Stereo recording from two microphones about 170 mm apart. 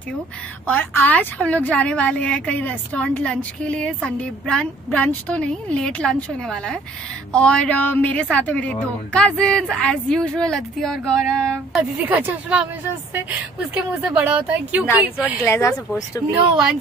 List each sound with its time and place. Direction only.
0.7 s a woman's voice: 10° left (ahead or behind)
12.0 s speech: 10° right (ahead or behind)
15.4 s a woman's voice: 15° left (ahead or behind)